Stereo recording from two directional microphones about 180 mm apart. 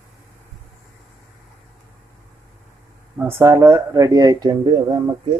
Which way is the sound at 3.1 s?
15° right (ahead or behind).